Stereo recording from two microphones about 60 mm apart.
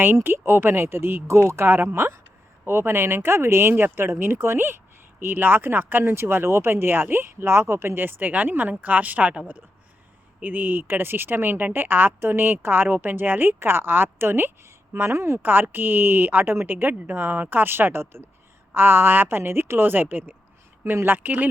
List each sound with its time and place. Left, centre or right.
0.0 s speech: right
10.4 s speech: right
15.4 s speech: right